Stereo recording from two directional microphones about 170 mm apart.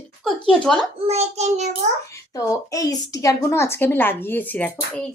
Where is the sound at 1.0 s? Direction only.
40° right (ahead or behind).